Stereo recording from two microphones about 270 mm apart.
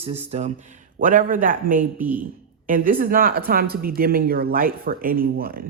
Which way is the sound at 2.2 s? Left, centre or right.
Right.